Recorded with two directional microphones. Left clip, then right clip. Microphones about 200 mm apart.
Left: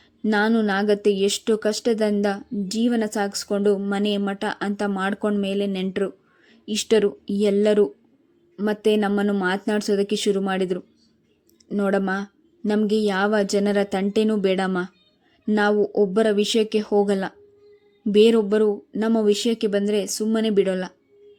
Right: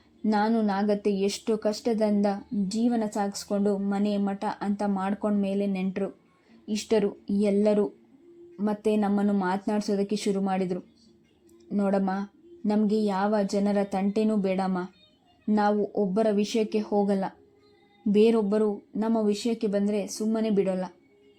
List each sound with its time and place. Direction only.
0.2 s speech: 10° left (ahead or behind)